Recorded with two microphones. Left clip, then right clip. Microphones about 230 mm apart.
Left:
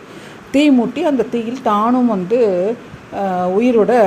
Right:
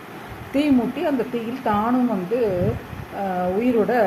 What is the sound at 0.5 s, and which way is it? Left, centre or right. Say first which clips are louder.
Speech: left 7 dB; left.